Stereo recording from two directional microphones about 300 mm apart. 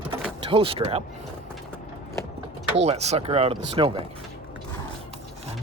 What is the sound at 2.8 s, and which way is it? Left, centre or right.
Speech, right.